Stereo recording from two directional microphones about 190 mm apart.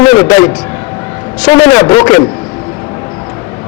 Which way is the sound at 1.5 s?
20° left (ahead or behind).